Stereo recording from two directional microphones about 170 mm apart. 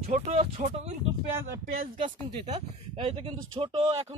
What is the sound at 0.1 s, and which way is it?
Speech, 45° right (ahead or behind).